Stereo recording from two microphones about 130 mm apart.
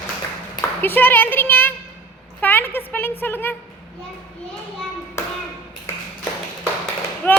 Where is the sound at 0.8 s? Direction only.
15° left (ahead or behind).